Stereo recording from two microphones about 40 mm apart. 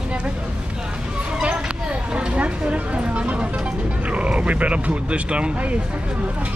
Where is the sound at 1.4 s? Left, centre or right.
Right.